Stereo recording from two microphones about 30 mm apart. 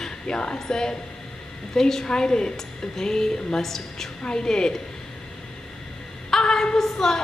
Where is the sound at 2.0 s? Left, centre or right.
Left.